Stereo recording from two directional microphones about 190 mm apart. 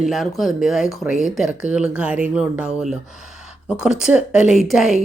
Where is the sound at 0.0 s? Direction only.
Centre (ahead or behind).